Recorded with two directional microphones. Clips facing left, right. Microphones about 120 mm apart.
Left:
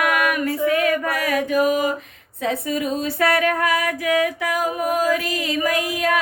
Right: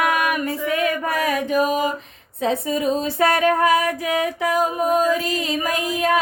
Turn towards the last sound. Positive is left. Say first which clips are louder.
# right 1 dB
turn(degrees=-25)  # may be behind; listen again after turning